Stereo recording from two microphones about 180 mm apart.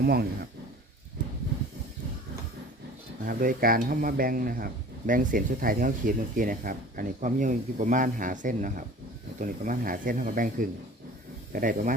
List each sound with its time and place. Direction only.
0.0 s speech: 60° right (ahead or behind)
3.2 s speech: 55° right (ahead or behind)